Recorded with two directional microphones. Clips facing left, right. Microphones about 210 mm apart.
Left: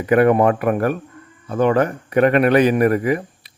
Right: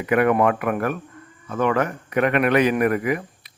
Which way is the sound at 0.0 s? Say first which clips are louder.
Left 4 dB; 35° left (ahead or behind).